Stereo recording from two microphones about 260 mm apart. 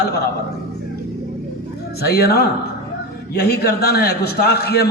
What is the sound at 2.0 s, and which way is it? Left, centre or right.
Speech, left.